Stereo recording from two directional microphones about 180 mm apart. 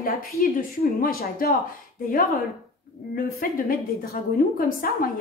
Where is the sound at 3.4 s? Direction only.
50° left (ahead or behind).